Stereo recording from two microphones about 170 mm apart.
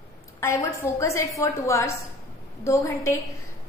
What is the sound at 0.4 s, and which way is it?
A woman's voice, 15° left (ahead or behind).